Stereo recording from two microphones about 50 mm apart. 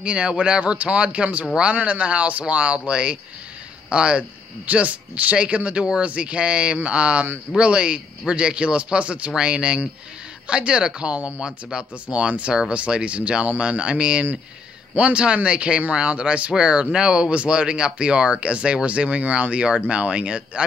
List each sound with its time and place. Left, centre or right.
0.0 s speech: right